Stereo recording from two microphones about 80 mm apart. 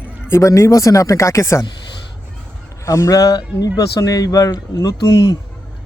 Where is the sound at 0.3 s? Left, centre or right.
Left.